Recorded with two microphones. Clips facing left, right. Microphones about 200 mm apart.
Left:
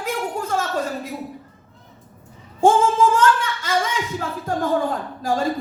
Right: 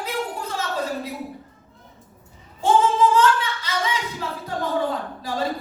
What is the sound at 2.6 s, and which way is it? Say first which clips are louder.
Singing: left 2 dB; 45° left (ahead or behind).